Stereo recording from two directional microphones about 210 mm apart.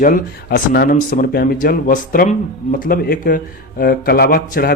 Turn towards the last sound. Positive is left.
turn(degrees=45)  # may be behind; listen again after turning